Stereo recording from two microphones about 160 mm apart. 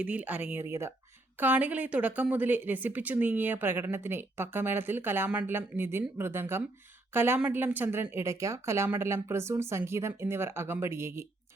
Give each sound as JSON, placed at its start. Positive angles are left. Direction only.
{"t": 0.0, "sound": "a woman's voice", "side_deg": -10}